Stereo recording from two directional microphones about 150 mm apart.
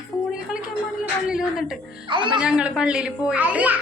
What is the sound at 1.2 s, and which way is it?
A child's voice, 5° right (ahead or behind).